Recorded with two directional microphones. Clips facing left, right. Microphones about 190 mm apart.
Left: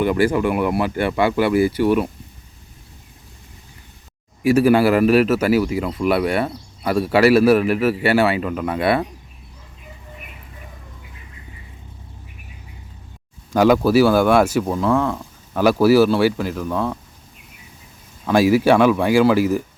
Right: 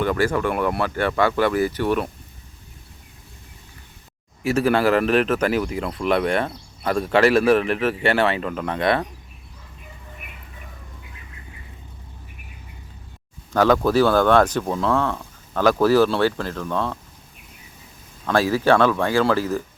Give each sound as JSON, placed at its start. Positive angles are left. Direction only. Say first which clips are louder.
{"t": 0.0, "sound": "a man's voice", "louder": "left 3 dB", "side_deg": 15}
{"t": 4.4, "sound": "a man's voice", "louder": "left 5 dB", "side_deg": 10}
{"t": 13.5, "sound": "a man's voice", "louder": "left 3 dB", "side_deg": 10}
{"t": 18.3, "sound": "a man's voice", "louder": "left 4 dB", "side_deg": 10}